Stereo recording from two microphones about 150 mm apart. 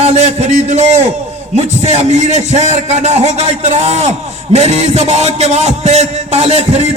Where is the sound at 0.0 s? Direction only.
45° right (ahead or behind).